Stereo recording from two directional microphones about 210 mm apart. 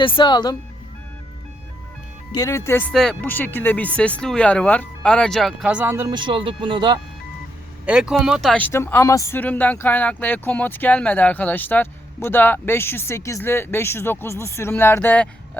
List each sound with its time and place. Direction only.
0.0 s speech: 25° left (ahead or behind)
2.3 s speech: 15° left (ahead or behind); by 7.0 s 20° right (ahead or behind)
7.9 s speech: 5° right (ahead or behind)